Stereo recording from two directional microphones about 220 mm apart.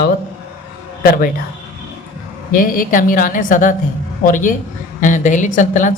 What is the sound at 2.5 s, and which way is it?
A woman's voice, 40° left (ahead or behind).